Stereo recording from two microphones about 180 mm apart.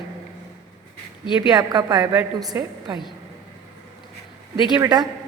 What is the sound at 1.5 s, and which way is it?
A woman's voice, 20° right (ahead or behind).